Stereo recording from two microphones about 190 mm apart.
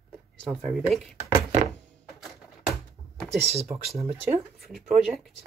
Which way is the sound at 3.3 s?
35° right (ahead or behind).